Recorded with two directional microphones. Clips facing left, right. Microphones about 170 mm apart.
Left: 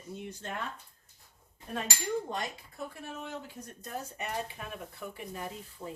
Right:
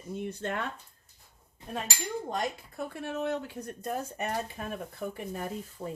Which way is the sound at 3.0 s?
70° right (ahead or behind).